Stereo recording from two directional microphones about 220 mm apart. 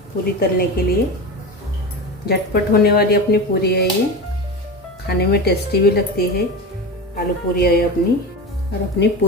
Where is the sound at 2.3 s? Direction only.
45° left (ahead or behind).